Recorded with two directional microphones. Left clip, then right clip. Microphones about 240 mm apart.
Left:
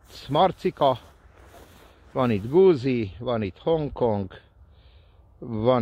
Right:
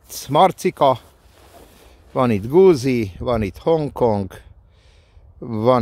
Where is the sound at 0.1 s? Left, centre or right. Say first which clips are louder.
Right 6 dB; right.